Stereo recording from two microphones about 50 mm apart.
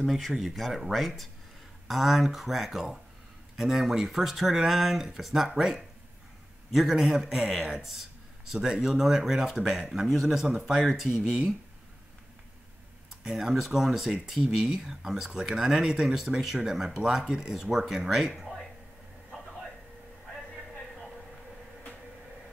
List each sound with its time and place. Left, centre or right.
0.0 s speech: centre
8.5 s speech: centre
8.9 s speech: centre
13.2 s speech: centre